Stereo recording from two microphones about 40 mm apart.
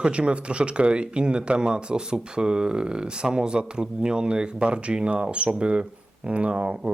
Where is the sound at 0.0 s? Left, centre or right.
Right.